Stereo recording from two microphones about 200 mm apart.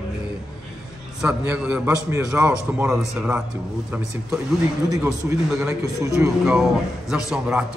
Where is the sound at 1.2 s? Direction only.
5° right (ahead or behind).